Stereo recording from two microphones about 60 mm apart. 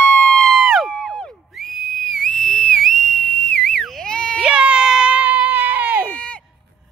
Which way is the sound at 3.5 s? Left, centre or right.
Centre.